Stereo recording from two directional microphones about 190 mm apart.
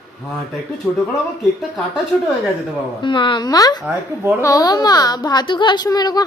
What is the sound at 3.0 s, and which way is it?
Speech, 25° left (ahead or behind).